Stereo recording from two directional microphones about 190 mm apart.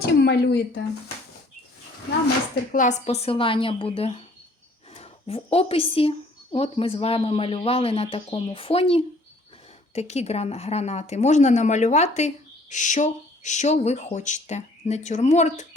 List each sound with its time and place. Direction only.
0.0 s speech: 60° left (ahead or behind)
2.7 s a woman's voice: 40° left (ahead or behind)